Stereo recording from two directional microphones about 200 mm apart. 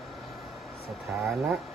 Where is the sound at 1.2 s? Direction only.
Centre (ahead or behind).